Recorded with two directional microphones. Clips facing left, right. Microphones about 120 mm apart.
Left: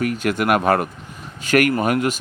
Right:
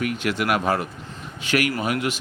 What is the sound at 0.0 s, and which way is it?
Speech, 40° left (ahead or behind).